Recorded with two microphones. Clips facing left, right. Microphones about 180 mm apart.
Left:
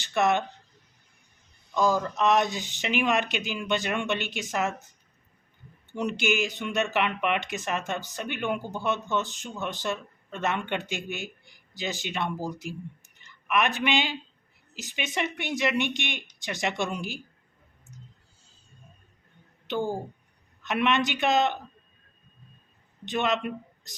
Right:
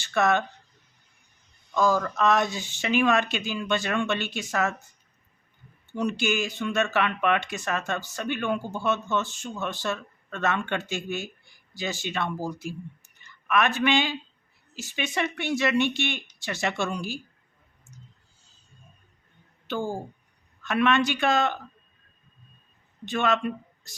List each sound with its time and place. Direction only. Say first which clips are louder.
0.0 s speech: right 1 dB; 20° left (ahead or behind)
1.7 s speech: right 1 dB; 15° left (ahead or behind)
5.9 s a woman's voice: right 1 dB; 20° left (ahead or behind)
19.6 s speech: left 1 dB; 20° left (ahead or behind)
23.0 s a man's voice: right 2 dB; 20° left (ahead or behind)